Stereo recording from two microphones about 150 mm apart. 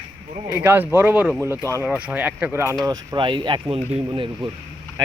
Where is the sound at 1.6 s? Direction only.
20° right (ahead or behind).